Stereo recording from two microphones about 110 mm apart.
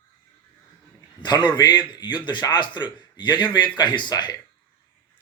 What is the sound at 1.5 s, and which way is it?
Speech, 40° left (ahead or behind).